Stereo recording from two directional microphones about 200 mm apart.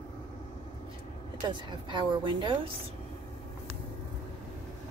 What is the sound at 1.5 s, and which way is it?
A woman's voice, 20° right (ahead or behind).